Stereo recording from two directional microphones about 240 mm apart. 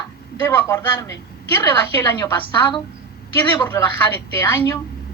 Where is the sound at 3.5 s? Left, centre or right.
Centre.